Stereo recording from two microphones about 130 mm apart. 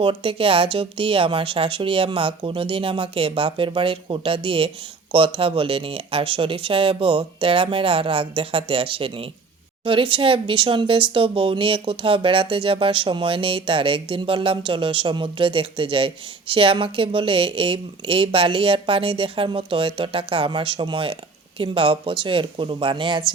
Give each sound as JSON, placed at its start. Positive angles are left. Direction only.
{"t": 0.0, "sound": "speech", "side_deg": -45}